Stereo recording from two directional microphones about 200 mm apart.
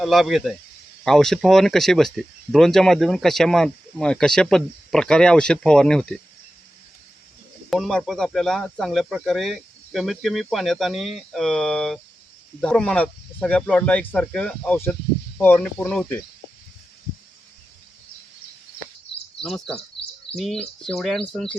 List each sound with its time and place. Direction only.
0.0 s speech: centre (ahead or behind)
7.7 s speech: centre (ahead or behind)
19.4 s speech: centre (ahead or behind)